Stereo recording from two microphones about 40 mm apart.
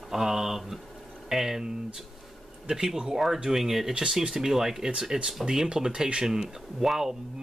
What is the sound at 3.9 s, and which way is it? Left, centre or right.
Speech, centre.